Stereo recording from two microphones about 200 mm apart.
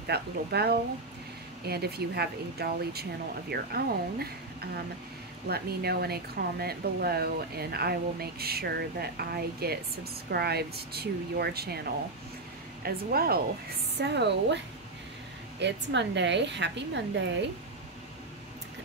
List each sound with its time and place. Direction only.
0.0 s a woman's voice: 55° right (ahead or behind)
12.8 s a woman's voice: 50° right (ahead or behind)
15.6 s a woman's voice: 60° right (ahead or behind)